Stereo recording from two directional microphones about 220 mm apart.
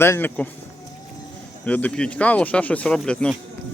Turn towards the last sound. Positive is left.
turn(degrees=5)  # may be behind; listen again after turning